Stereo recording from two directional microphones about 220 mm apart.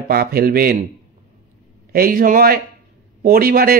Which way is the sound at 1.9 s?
40° right (ahead or behind).